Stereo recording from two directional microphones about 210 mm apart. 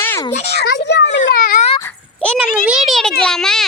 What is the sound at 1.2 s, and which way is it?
Speech, 40° left (ahead or behind).